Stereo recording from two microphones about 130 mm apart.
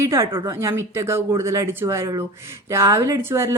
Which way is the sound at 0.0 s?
25° right (ahead or behind).